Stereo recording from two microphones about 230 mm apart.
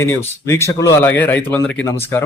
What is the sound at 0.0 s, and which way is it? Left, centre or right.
Speech, centre.